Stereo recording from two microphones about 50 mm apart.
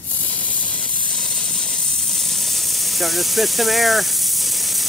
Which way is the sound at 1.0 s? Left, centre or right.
Centre.